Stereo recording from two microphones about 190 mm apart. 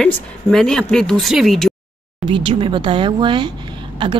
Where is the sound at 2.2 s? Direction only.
25° right (ahead or behind).